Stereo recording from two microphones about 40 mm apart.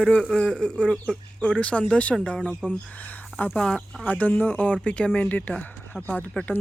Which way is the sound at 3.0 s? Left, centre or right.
Left.